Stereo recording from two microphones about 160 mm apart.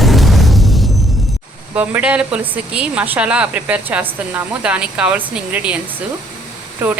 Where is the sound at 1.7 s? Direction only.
10° right (ahead or behind).